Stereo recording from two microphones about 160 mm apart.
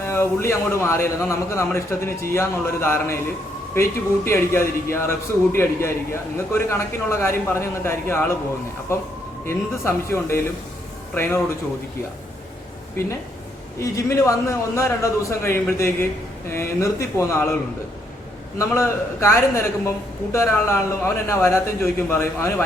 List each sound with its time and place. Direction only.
0.0 s a man's voice: 15° left (ahead or behind)
9.5 s a man's voice: 15° left (ahead or behind)
13.7 s a man's voice: 20° left (ahead or behind)
18.6 s a man's voice: 15° left (ahead or behind)